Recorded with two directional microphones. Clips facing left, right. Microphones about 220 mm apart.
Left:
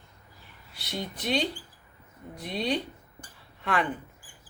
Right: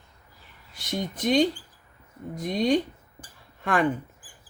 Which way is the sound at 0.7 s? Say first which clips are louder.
Right 5 dB; 45° right (ahead or behind).